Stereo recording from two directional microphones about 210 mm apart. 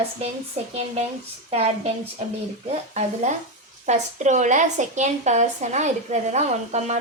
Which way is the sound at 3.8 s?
35° right (ahead or behind).